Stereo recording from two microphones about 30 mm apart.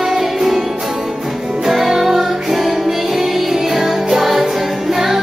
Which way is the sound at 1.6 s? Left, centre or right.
Centre.